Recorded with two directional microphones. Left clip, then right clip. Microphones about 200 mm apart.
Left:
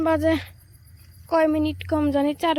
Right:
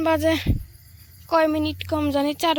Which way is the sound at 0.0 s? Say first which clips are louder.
Right 1 dB; 10° left (ahead or behind).